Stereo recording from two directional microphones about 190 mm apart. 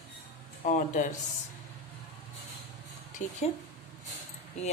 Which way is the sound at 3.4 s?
35° left (ahead or behind).